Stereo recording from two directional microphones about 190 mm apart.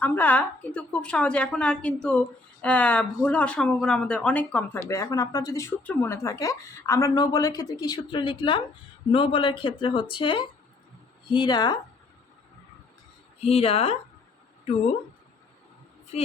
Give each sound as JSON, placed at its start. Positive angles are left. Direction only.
{"t": 0.0, "sound": "a woman's voice", "side_deg": 10}
{"t": 13.4, "sound": "speech", "side_deg": 30}
{"t": 16.1, "sound": "speech", "side_deg": 35}